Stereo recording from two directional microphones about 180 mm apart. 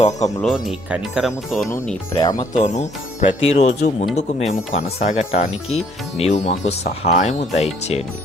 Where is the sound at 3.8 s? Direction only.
70° left (ahead or behind).